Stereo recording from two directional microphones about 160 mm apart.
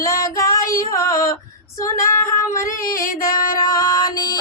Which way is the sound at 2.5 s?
20° left (ahead or behind).